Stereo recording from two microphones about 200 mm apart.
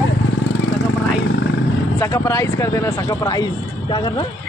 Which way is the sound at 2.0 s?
15° left (ahead or behind).